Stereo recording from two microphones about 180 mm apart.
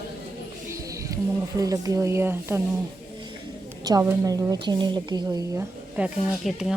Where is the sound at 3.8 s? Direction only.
15° right (ahead or behind).